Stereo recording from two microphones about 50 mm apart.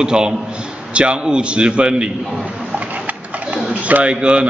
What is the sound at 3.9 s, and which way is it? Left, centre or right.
Speech, right.